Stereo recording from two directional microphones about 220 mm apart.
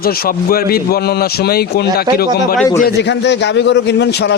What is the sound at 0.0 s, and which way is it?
A man's voice, 40° left (ahead or behind).